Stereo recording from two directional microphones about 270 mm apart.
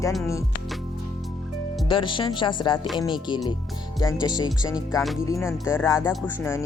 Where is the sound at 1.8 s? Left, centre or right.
Centre.